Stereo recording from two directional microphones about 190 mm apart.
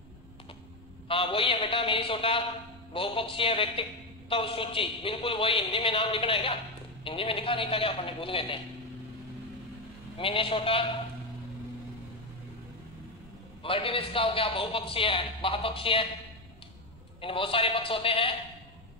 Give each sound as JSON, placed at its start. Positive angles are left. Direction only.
{"t": 1.0, "sound": "a man's voice", "side_deg": 30}
{"t": 10.1, "sound": "a man's voice", "side_deg": 30}
{"t": 13.6, "sound": "a man's voice", "side_deg": 30}
{"t": 17.2, "sound": "a man's voice", "side_deg": 30}